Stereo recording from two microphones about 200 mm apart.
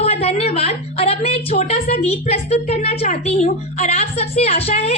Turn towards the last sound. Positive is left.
turn(degrees=30)  # may be behind; listen again after turning